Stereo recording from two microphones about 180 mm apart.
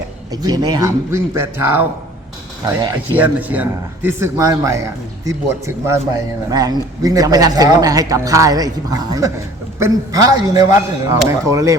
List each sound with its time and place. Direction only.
0.3 s speech: 20° right (ahead or behind)
3.1 s a man's voice: 10° right (ahead or behind)